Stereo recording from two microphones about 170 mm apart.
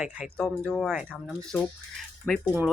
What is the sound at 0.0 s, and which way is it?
Speech, 10° right (ahead or behind).